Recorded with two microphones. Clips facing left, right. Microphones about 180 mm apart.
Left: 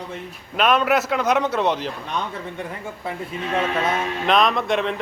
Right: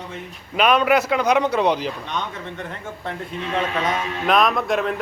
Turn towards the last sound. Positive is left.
turn(degrees=0)  # may be behind; listen again after turning